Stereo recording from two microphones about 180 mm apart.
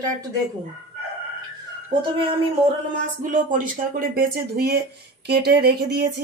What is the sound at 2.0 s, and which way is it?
Speech, 30° right (ahead or behind).